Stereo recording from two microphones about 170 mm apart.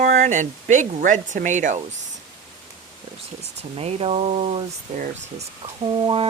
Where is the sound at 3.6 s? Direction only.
35° right (ahead or behind).